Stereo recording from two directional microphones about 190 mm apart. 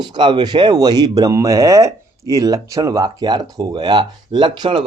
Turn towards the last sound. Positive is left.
turn(degrees=-25)  # may be behind; listen again after turning